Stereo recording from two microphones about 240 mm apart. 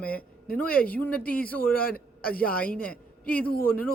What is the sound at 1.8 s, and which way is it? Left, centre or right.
Speech, left.